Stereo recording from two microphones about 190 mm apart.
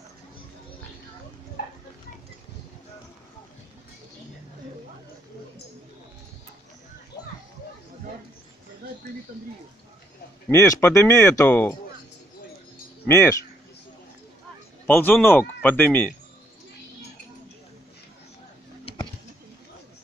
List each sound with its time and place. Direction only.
10.5 s speech: 15° left (ahead or behind)
13.0 s speech: 15° left (ahead or behind)
14.9 s speech: 10° left (ahead or behind)